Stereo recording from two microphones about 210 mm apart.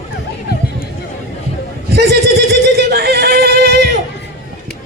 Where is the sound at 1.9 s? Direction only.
50° right (ahead or behind).